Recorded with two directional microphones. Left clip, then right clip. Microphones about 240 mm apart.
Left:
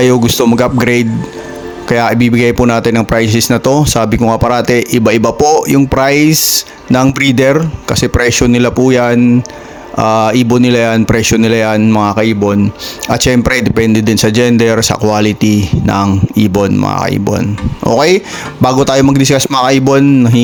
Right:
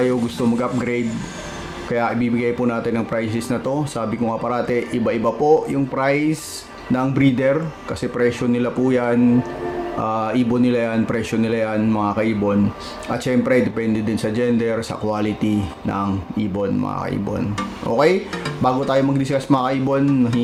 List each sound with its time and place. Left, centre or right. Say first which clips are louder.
0.0 s speech: left 11 dB; left